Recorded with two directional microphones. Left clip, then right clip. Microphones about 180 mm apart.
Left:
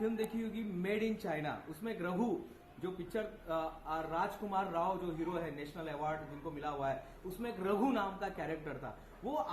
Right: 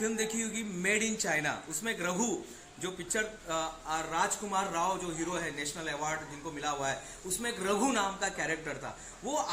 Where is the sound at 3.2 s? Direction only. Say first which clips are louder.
Right 4 dB; 25° right (ahead or behind).